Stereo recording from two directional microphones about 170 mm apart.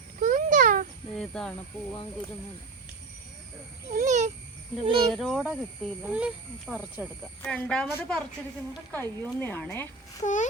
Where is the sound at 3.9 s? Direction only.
50° right (ahead or behind).